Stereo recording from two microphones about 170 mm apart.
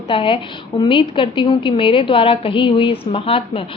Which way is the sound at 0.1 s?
30° left (ahead or behind).